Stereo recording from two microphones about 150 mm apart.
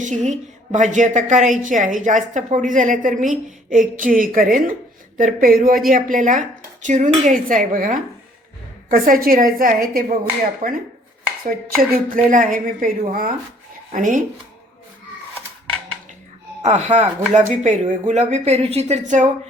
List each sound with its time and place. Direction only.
0.0 s a woman's voice: 55° right (ahead or behind)
12.0 s a woman's voice: 65° right (ahead or behind)
16.6 s speech: 50° right (ahead or behind)